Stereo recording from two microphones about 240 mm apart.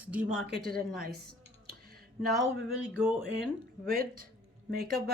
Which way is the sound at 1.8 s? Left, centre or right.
Right.